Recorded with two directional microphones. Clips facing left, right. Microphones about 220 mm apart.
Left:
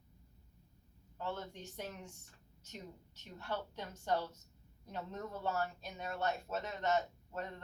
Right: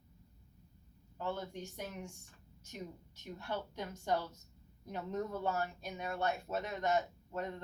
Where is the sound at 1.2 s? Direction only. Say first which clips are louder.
Right 3 dB; 10° right (ahead or behind).